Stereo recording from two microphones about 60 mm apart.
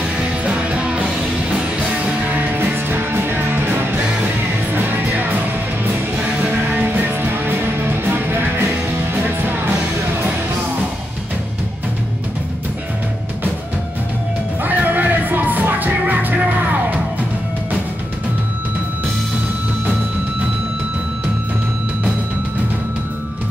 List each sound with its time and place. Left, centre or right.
0.0 s music: right
14.6 s music: right